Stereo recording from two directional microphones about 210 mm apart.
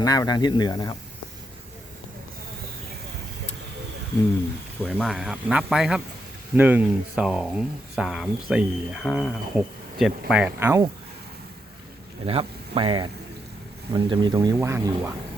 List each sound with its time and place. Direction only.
0.0 s speech: 15° left (ahead or behind)
4.9 s speech: centre (ahead or behind)
12.2 s speech: 25° right (ahead or behind)